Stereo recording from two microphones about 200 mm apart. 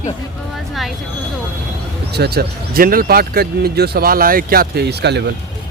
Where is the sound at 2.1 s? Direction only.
55° right (ahead or behind).